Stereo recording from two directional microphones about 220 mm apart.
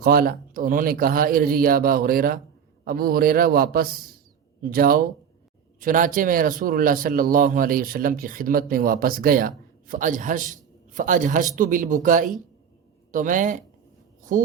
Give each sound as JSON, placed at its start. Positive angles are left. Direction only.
{"t": 0.0, "sound": "a man's voice", "side_deg": -40}